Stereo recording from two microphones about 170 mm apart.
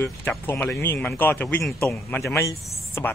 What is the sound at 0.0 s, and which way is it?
Speech, 10° left (ahead or behind).